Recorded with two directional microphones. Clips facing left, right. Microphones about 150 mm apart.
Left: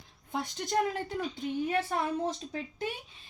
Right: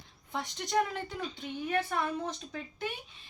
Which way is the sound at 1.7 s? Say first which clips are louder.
Right 3 dB; 35° left (ahead or behind).